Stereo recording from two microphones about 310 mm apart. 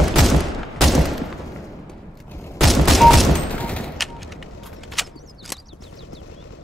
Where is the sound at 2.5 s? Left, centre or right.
Centre.